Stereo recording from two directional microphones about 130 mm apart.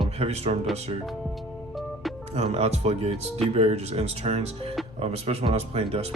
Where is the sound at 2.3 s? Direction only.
50° right (ahead or behind).